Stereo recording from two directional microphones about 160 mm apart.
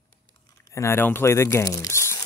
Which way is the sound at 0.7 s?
15° left (ahead or behind).